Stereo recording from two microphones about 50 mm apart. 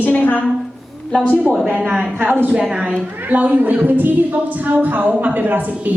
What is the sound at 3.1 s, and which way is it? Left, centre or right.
A woman's voice, right.